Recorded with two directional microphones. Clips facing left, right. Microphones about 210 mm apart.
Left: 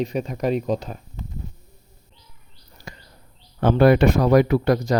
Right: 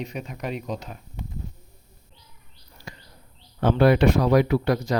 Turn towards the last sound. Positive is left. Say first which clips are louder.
# left 3 dB
turn(degrees=45)  # may be behind; listen again after turning